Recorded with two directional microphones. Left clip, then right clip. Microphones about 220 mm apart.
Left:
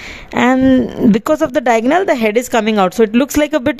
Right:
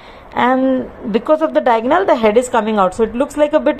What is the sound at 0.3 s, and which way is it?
A woman's voice, 50° left (ahead or behind).